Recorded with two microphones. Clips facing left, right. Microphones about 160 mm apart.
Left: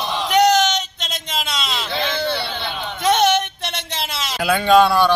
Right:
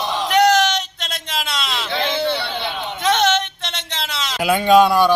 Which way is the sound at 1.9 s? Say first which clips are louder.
Right 2 dB; 15° right (ahead or behind).